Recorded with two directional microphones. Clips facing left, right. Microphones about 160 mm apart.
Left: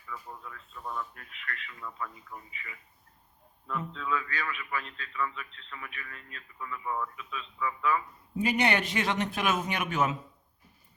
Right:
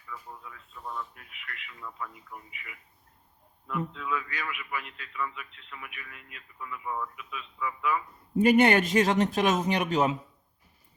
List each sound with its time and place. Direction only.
0.1 s a man's voice: 5° right (ahead or behind)
8.4 s a man's voice: 50° right (ahead or behind); by 10.2 s 30° right (ahead or behind)